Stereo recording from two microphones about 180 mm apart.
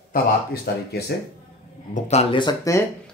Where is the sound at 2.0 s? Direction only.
40° left (ahead or behind).